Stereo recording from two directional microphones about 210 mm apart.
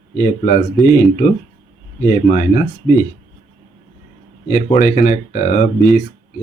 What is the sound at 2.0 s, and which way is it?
Speech, 40° left (ahead or behind).